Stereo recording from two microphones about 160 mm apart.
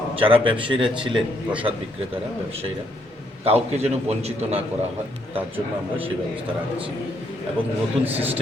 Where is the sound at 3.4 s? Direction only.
40° right (ahead or behind).